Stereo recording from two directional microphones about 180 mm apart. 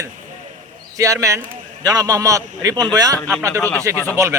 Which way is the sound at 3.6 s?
10° left (ahead or behind).